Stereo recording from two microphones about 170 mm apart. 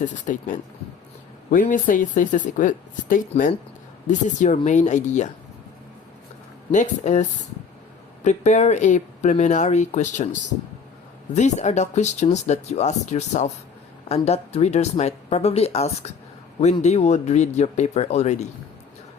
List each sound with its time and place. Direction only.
0.0 s speech: 50° left (ahead or behind)
6.7 s speech: 45° left (ahead or behind)